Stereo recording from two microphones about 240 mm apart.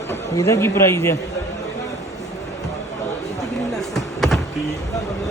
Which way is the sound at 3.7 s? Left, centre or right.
Centre.